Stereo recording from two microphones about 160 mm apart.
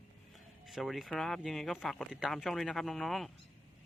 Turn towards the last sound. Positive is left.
turn(degrees=0)  # may be behind; listen again after turning